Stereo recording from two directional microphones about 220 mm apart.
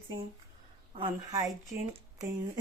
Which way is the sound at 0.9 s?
20° right (ahead or behind).